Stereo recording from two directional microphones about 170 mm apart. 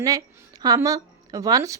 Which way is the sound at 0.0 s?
20° right (ahead or behind).